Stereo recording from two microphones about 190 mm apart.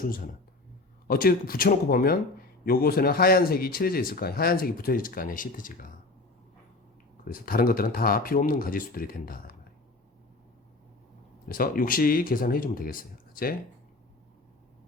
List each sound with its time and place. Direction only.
1.0 s speech: 50° left (ahead or behind)
7.3 s speech: 50° left (ahead or behind)
11.4 s speech: 50° left (ahead or behind)